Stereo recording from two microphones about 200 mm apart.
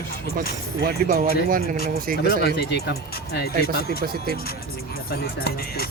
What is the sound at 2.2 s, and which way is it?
Speech, 50° left (ahead or behind).